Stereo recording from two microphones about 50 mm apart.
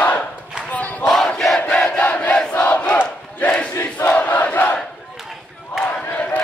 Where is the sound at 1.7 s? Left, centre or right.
Left.